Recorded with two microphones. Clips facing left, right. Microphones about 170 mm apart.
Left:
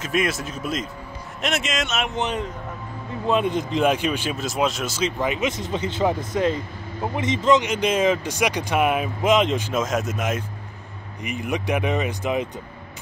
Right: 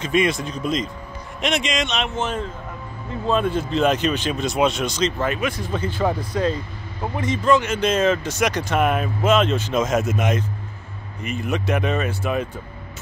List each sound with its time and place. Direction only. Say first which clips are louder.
0.0 s speech: right 4 dB; 5° left (ahead or behind)
2.0 s speech: even; 15° left (ahead or behind)
9.8 s speech: right 6 dB; centre (ahead or behind)
11.2 s speech: right 1 dB; 15° left (ahead or behind)